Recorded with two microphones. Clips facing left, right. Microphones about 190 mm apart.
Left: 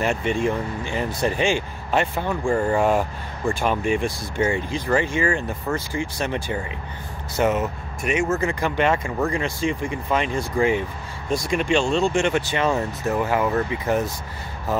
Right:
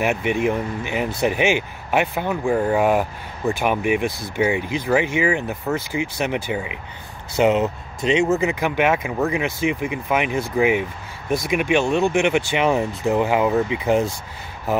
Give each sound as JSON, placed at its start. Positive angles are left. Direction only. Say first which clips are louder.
{"t": 0.0, "sound": "speech", "louder": "right 2 dB", "side_deg": -10}
{"t": 8.4, "sound": "speech", "louder": "right 2 dB", "side_deg": -10}